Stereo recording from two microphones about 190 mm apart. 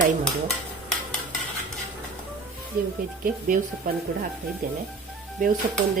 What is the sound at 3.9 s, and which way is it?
Speech, 45° right (ahead or behind).